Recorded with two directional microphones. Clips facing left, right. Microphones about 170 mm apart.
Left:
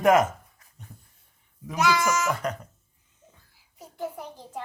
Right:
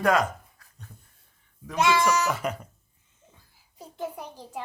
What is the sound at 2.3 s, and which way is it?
Speech, 10° right (ahead or behind).